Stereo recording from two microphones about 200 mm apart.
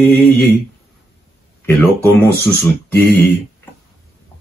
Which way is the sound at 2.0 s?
10° left (ahead or behind).